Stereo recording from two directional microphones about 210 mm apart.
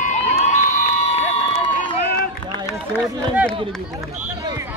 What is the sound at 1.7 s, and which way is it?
Run, 45° left (ahead or behind).